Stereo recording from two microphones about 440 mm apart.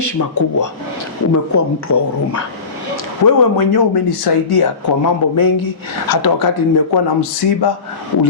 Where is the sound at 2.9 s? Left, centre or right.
Left.